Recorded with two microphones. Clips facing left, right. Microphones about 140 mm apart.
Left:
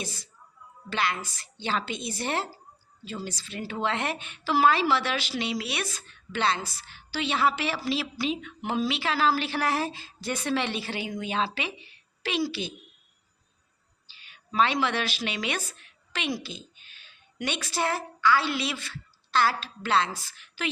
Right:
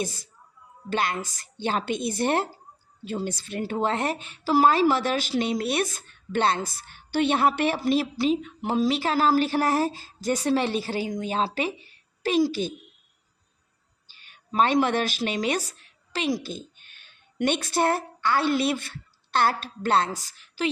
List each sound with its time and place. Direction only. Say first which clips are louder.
0.0 s a woman's voice: right 7 dB; 50° right (ahead or behind)
8.2 s a woman's voice: right 6 dB; 40° right (ahead or behind)
14.1 s speech: right 3 dB; 50° right (ahead or behind)
20.1 s speech: right 6 dB; 40° right (ahead or behind)